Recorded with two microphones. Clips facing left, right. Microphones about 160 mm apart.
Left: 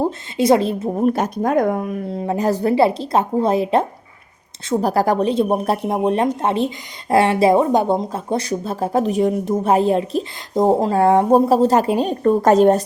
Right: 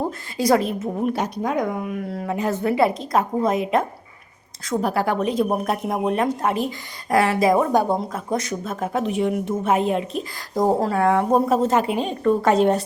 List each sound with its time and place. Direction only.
0.0 s a woman's voice: 25° left (ahead or behind); by 2.0 s 40° left (ahead or behind)
2.0 s a woman's voice: 25° left (ahead or behind)
2.3 s a woman's voice: 35° left (ahead or behind)
10.5 s a woman's voice: 25° left (ahead or behind); by 12.8 s 40° left (ahead or behind)